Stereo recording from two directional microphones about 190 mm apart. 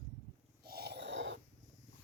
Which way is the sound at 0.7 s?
60° right (ahead or behind).